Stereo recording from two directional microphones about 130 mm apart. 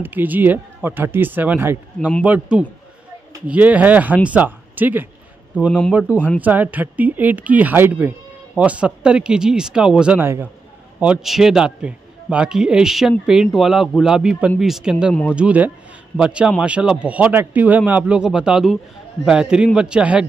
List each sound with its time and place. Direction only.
0.0 s speech: 15° right (ahead or behind)
5.7 s speech: 10° left (ahead or behind)
6.4 s a man's voice: 10° right (ahead or behind)